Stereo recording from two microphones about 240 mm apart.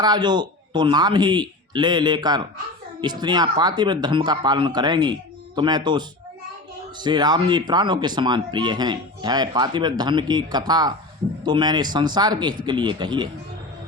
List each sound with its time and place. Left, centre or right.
0.0 s speech: centre